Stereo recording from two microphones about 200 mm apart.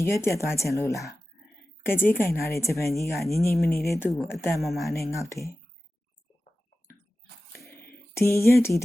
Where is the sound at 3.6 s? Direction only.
50° left (ahead or behind).